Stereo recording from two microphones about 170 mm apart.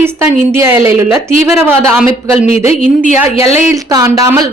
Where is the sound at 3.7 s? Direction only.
20° right (ahead or behind).